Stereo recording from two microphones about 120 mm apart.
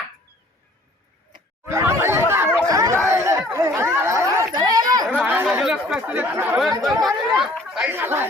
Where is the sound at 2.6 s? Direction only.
30° right (ahead or behind).